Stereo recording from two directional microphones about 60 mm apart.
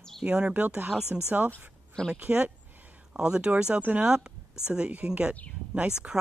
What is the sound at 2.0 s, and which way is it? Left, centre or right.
Speech, right.